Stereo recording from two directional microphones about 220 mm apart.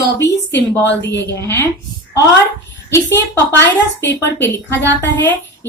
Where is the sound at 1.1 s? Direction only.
50° left (ahead or behind).